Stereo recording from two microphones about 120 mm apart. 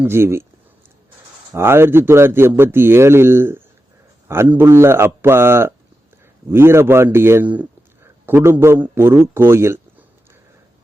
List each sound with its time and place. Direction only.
0.0 s a man's voice: 20° right (ahead or behind)
1.5 s a man's voice: 20° right (ahead or behind)